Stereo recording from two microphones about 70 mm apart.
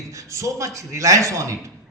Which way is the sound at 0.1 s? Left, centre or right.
Right.